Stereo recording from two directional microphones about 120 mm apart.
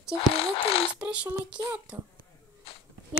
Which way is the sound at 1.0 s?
10° right (ahead or behind).